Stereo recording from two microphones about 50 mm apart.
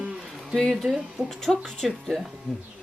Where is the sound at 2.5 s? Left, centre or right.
Centre.